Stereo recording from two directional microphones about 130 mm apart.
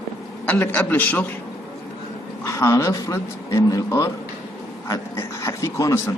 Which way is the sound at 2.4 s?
25° left (ahead or behind).